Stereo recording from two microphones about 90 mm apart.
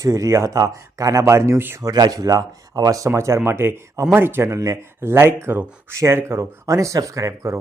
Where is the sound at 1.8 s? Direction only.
45° right (ahead or behind).